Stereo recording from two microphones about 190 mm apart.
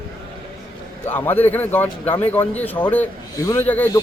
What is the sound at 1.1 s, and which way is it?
Speech, 10° left (ahead or behind).